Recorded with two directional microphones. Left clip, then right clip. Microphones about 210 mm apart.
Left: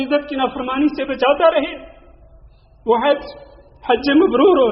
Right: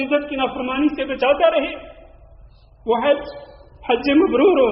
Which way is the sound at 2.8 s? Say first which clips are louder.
Left 2 dB; 30° left (ahead or behind).